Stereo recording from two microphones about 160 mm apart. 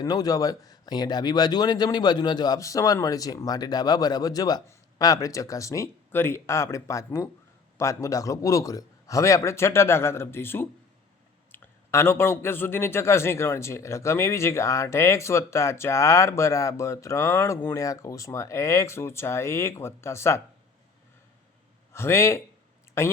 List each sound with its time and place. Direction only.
0.0 s a man's voice: 25° left (ahead or behind)
21.9 s a man's voice: 15° left (ahead or behind)